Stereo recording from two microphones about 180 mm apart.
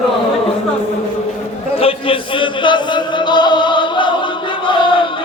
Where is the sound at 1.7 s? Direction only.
30° left (ahead or behind).